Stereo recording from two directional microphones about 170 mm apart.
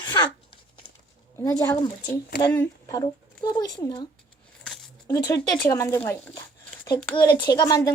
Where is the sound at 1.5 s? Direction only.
15° left (ahead or behind).